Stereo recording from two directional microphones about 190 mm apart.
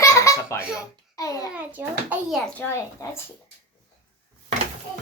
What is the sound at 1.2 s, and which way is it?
Speech, 20° left (ahead or behind).